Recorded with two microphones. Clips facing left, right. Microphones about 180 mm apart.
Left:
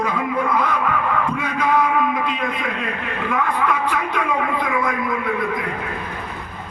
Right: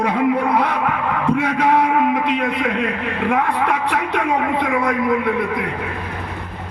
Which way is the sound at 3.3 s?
75° right (ahead or behind).